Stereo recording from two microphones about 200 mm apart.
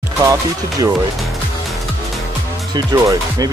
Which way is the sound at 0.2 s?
15° right (ahead or behind).